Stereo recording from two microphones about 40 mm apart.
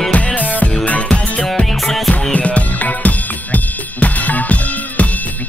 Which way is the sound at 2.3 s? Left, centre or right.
Left.